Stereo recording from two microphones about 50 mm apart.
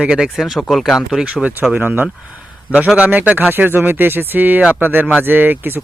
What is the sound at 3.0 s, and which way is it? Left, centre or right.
Speech, right.